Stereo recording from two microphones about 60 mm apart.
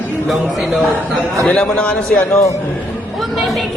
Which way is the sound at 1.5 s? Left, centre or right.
Centre.